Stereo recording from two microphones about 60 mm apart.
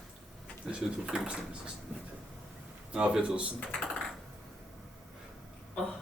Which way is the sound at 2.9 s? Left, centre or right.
Centre.